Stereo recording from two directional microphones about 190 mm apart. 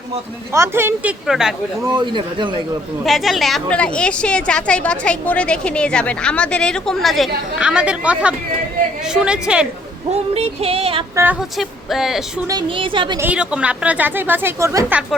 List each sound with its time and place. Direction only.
0.5 s a woman's voice: 15° right (ahead or behind)
1.9 s a woman's voice: 25° right (ahead or behind)
3.0 s a woman's voice: centre (ahead or behind)
10.1 s female singing: 35° right (ahead or behind)
11.1 s a woman's voice: 15° right (ahead or behind)
11.3 s a woman's voice: centre (ahead or behind)
12.5 s a woman's voice: 25° right (ahead or behind)
13.1 s a woman's voice: 10° right (ahead or behind)